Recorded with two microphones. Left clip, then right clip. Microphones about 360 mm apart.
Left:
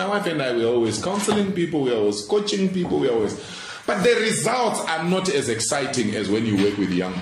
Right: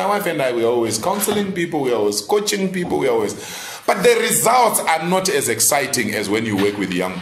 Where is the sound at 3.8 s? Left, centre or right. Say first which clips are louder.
Right 4 dB; centre.